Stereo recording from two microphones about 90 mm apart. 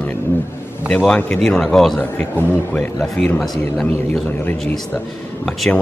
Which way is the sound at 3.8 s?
15° left (ahead or behind).